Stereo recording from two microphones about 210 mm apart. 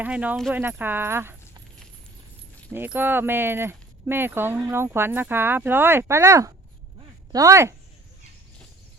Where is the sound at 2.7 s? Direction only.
10° right (ahead or behind).